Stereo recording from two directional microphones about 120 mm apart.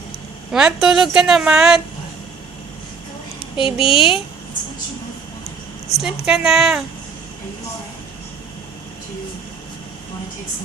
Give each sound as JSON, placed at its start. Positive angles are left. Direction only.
{"t": 0.5, "sound": "a woman's voice", "side_deg": -5}
{"t": 3.6, "sound": "a woman's voice", "side_deg": 50}
{"t": 6.0, "sound": "a woman's voice", "side_deg": -5}